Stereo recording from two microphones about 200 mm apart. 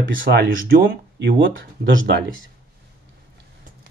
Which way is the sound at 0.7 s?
50° right (ahead or behind).